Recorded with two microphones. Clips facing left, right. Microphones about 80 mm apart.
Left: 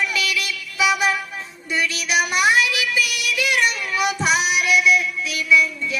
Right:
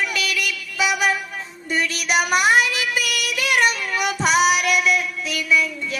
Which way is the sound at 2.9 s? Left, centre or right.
Right.